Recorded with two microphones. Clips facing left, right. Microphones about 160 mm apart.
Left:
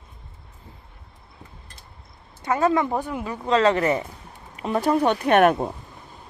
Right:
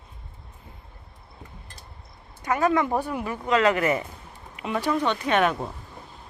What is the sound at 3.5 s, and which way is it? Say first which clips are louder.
Speech: left 2 dB; 30° left (ahead or behind).